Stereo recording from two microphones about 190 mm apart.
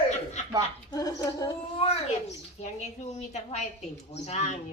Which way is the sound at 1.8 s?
35° left (ahead or behind).